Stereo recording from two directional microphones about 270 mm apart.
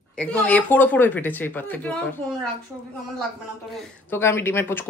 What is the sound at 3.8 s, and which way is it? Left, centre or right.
A woman's voice, centre.